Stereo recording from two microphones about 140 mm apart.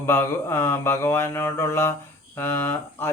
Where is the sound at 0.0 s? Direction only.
15° left (ahead or behind).